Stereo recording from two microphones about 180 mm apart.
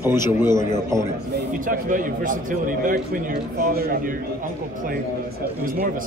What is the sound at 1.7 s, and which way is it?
A man's voice, 50° right (ahead or behind).